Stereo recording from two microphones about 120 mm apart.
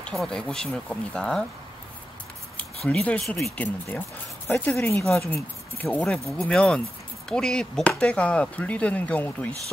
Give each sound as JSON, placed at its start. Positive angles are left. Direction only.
{"t": 0.0, "sound": "speech", "side_deg": 5}
{"t": 2.5, "sound": "speech", "side_deg": 10}
{"t": 3.5, "sound": "speech", "side_deg": 10}